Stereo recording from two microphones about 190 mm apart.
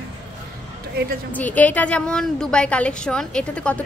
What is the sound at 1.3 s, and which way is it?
A woman's voice, 10° left (ahead or behind).